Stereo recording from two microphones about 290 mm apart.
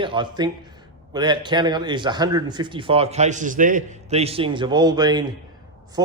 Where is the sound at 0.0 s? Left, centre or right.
Centre.